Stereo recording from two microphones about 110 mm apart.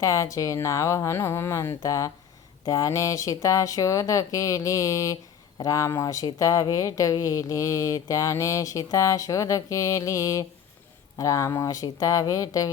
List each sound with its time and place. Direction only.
0.0 s speech: 30° left (ahead or behind)